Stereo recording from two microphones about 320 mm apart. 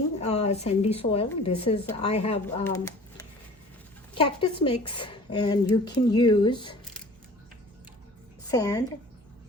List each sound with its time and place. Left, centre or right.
0.2 s speech: centre
2.6 s a sound: centre
4.1 s speech: centre
8.4 s speech: centre